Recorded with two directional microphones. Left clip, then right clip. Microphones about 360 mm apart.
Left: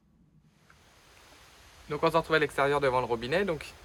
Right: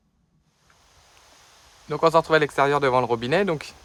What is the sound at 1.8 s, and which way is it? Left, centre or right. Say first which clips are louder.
Speech: right 8 dB; centre.